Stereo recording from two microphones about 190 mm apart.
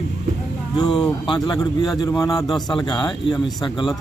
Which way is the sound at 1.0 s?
20° left (ahead or behind).